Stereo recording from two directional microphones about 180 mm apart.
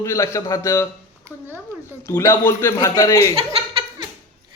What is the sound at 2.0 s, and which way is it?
A man's voice, 15° left (ahead or behind).